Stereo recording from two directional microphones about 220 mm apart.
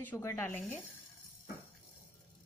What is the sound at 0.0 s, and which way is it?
Speech, 10° left (ahead or behind).